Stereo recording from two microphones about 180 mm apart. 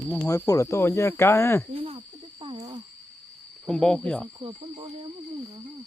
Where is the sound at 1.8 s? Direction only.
30° right (ahead or behind).